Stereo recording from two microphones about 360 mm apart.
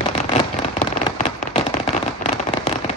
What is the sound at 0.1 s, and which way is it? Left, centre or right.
Fireworks, centre.